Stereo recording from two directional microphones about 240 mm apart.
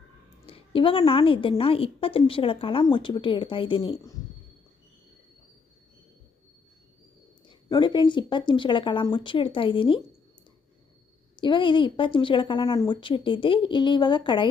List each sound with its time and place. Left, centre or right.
0.4 s a woman's voice: left
7.4 s a woman's voice: centre
11.3 s a woman's voice: centre